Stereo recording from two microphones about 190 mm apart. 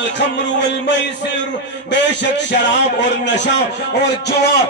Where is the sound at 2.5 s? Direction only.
65° left (ahead or behind).